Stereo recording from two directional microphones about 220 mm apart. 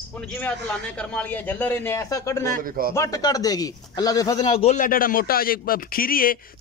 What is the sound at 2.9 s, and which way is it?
Speech, 15° left (ahead or behind).